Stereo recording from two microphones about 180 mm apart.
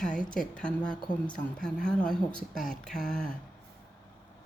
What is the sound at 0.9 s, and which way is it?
Speech, 25° left (ahead or behind).